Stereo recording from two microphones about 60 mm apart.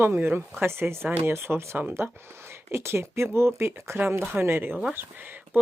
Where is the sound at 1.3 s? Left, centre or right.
Right.